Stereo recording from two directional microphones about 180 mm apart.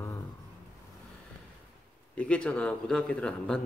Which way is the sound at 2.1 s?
5° left (ahead or behind).